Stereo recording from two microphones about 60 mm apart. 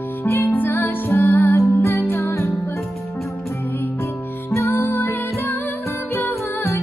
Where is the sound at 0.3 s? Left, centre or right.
Left.